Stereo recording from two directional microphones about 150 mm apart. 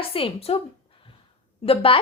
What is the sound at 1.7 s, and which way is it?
Speech, 35° left (ahead or behind).